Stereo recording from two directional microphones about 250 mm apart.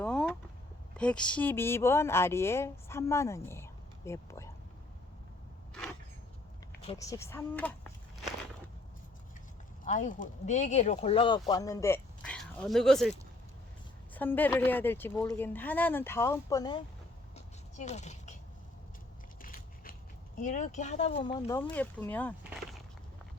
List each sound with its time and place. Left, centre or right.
0.0 s vehicle: centre
0.9 s speech: centre
6.8 s speech: centre
9.8 s speech: left
17.3 s a sound: left
19.4 s biting: left
20.4 s speech: left; by 22.4 s centre